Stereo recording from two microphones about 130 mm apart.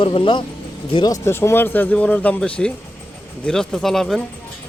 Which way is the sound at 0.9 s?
30° left (ahead or behind).